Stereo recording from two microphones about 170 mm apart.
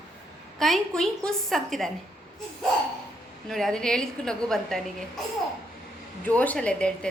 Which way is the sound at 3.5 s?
5° left (ahead or behind).